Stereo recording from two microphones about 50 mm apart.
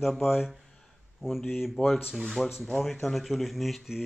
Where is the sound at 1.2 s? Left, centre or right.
Centre.